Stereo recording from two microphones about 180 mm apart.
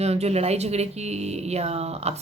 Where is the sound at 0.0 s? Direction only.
35° right (ahead or behind).